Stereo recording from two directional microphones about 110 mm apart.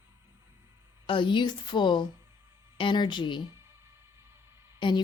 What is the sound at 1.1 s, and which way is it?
Speech, 50° left (ahead or behind).